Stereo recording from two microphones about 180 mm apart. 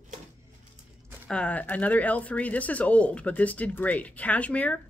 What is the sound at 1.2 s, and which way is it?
Speech, 5° left (ahead or behind).